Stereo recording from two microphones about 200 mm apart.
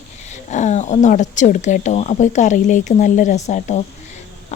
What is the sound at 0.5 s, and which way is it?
Speech, 35° left (ahead or behind).